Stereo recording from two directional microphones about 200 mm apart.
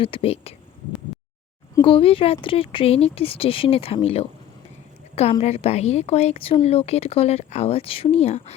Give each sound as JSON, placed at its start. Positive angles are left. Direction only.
{"t": 0.0, "sound": "speech", "side_deg": 30}
{"t": 1.7, "sound": "a woman's voice", "side_deg": 25}